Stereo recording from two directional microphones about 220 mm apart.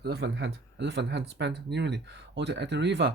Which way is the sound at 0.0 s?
50° right (ahead or behind).